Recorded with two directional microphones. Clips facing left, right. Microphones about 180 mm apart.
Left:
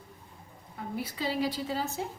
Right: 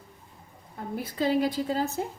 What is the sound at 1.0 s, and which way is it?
Speech, 50° right (ahead or behind).